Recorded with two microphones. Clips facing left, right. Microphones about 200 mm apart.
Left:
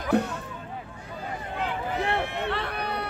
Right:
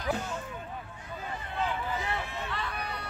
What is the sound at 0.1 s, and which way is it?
Speech, 60° left (ahead or behind).